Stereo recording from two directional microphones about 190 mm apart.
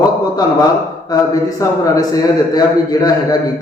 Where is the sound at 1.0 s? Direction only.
20° left (ahead or behind).